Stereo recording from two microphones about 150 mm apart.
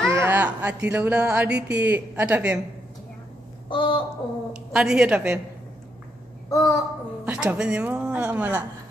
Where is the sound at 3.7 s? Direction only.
35° left (ahead or behind).